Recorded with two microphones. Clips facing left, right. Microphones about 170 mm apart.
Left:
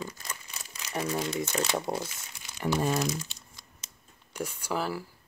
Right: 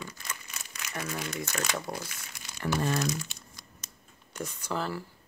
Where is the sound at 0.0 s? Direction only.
30° left (ahead or behind).